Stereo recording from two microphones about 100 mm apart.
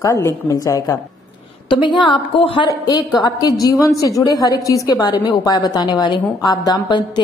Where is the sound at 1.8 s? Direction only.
50° left (ahead or behind).